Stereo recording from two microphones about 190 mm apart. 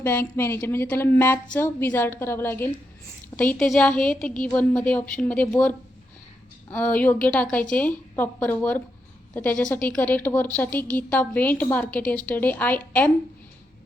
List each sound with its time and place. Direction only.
0.0 s a woman's voice: 10° left (ahead or behind)